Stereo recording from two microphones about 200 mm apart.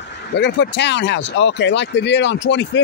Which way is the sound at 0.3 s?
60° left (ahead or behind).